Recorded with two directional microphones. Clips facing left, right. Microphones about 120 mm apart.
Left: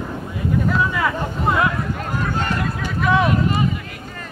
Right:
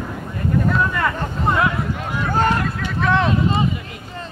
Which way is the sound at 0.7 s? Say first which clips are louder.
Left 1 dB; centre (ahead or behind).